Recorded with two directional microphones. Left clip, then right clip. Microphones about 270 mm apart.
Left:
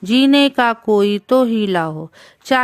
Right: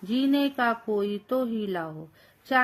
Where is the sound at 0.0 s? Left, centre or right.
Left.